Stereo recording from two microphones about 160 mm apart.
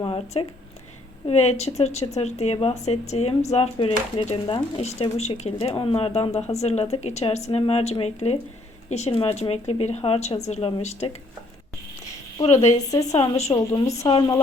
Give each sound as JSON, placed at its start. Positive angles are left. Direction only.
{"t": 0.0, "sound": "a woman's voice", "side_deg": 35}
{"t": 12.7, "sound": "a woman's voice", "side_deg": 20}